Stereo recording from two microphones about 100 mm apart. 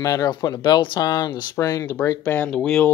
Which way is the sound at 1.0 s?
40° left (ahead or behind).